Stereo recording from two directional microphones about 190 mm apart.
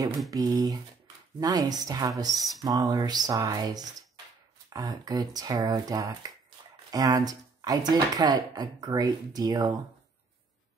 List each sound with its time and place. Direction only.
0.3 s speech: 20° right (ahead or behind)